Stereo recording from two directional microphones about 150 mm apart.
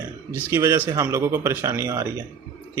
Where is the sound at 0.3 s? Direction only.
15° right (ahead or behind).